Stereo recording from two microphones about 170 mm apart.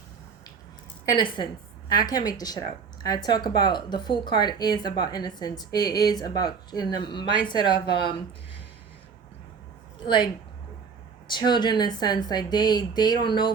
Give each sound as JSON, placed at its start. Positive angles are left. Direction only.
{"t": 1.1, "sound": "speech", "side_deg": 25}
{"t": 11.3, "sound": "speech", "side_deg": 25}